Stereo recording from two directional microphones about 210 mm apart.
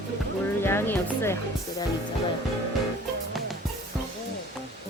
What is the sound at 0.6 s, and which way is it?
Music, 10° left (ahead or behind).